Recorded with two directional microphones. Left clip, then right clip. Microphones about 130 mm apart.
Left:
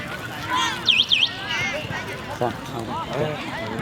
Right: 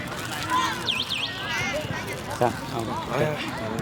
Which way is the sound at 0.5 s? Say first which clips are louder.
Left 2 dB; 10° left (ahead or behind).